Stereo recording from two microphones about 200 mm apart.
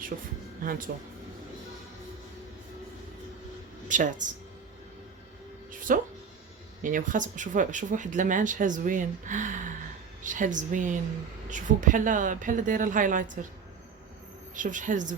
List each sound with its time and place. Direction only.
0.1 s speech: 40° right (ahead or behind)
3.8 s speech: 40° right (ahead or behind)
5.7 s music: 40° right (ahead or behind)
6.8 s speech: 40° right (ahead or behind)
14.5 s speech: 40° right (ahead or behind)